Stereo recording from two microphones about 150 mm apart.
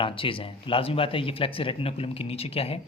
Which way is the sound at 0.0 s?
35° left (ahead or behind).